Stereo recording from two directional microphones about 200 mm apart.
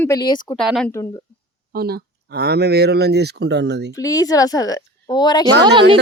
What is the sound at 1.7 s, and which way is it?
Speech, 50° right (ahead or behind).